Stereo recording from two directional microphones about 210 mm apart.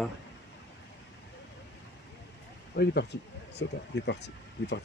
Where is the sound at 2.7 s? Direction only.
50° left (ahead or behind).